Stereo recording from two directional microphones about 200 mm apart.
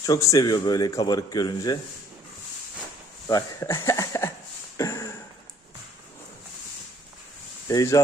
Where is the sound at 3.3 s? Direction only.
15° left (ahead or behind).